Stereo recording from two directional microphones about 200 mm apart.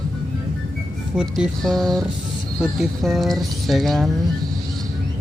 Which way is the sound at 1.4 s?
Centre (ahead or behind).